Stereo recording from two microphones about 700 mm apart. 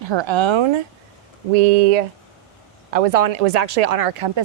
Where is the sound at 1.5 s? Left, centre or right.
Right.